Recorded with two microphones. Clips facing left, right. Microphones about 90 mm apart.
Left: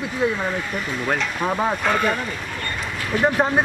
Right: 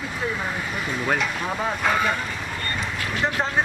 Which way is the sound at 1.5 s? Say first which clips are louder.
Left 8 dB; 10° left (ahead or behind).